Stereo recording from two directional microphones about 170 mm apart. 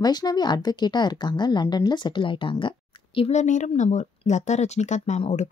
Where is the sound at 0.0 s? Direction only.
25° left (ahead or behind).